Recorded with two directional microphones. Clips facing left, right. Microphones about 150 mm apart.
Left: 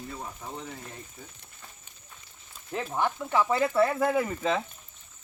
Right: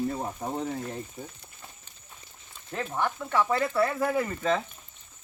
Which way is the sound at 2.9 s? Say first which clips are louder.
Left 1 dB; 15° left (ahead or behind).